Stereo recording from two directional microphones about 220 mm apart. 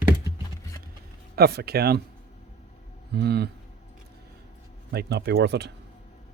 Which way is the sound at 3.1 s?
45° right (ahead or behind).